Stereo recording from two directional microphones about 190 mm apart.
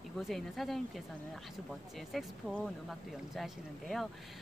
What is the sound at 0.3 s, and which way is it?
Speech, centre (ahead or behind).